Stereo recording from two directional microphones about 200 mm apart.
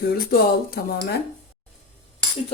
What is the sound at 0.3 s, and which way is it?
Speech, 50° left (ahead or behind).